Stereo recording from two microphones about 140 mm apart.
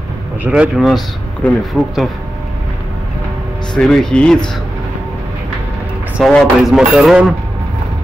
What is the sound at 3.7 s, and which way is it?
Speech, 5° left (ahead or behind).